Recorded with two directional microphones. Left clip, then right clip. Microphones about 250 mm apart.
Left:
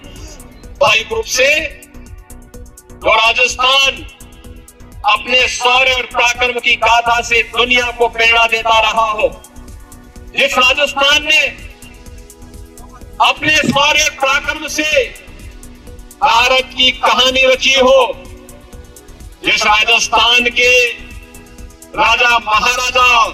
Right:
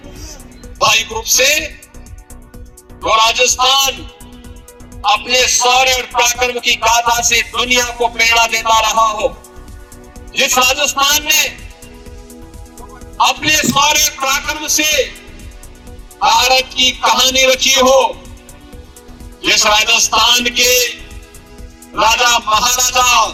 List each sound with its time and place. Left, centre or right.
0.8 s speech: centre
3.1 s a man's voice: centre
5.0 s a man's voice: centre
10.3 s a man's voice: centre
13.2 s a man's voice: centre
16.4 s a man's voice: centre
19.5 s a man's voice: centre
22.0 s a man's voice: centre